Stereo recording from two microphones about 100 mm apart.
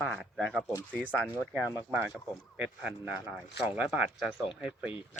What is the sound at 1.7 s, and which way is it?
Speech, 20° right (ahead or behind).